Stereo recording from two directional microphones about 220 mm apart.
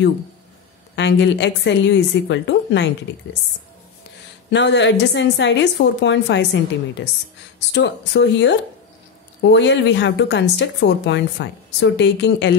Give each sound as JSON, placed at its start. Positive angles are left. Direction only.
{"t": 0.9, "sound": "a woman's voice", "side_deg": 55}
{"t": 4.5, "sound": "a woman's voice", "side_deg": 55}
{"t": 7.7, "sound": "a woman's voice", "side_deg": 55}